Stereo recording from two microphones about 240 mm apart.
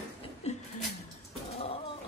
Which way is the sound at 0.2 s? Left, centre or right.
Left.